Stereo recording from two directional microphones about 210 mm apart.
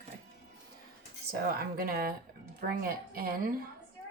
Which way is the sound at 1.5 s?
45° right (ahead or behind).